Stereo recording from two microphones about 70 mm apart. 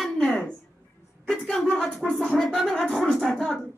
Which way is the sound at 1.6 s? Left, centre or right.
Centre.